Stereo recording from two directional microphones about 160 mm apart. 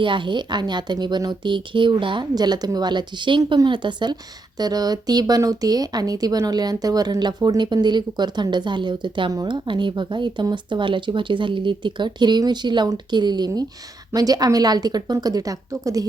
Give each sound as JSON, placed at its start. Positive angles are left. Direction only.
{"t": 0.0, "sound": "a woman's voice", "side_deg": -30}